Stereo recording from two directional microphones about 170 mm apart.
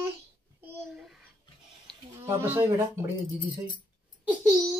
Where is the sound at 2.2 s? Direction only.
15° right (ahead or behind).